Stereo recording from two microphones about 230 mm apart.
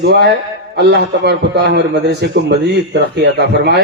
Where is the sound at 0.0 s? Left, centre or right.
Right.